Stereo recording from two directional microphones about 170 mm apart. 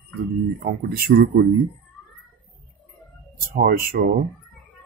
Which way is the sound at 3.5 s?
55° right (ahead or behind).